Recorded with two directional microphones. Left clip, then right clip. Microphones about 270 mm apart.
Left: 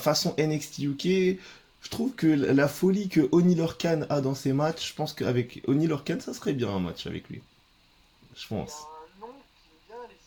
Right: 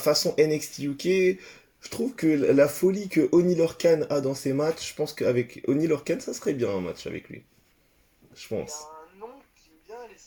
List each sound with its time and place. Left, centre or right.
0.0 s speech: left
8.4 s speech: left